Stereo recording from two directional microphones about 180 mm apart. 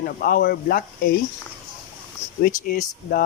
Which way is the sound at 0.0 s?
55° left (ahead or behind).